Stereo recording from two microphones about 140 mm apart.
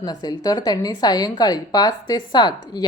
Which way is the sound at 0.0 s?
30° left (ahead or behind).